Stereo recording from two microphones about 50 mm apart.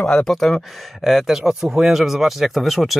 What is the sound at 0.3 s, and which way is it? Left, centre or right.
Speech, centre.